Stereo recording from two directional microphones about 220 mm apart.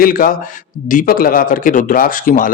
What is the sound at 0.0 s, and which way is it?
Speech, 40° left (ahead or behind).